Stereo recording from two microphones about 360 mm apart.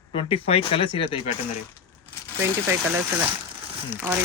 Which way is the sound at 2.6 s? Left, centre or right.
Centre.